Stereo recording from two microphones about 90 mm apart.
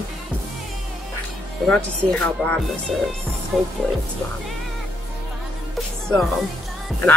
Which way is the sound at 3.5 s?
Centre (ahead or behind).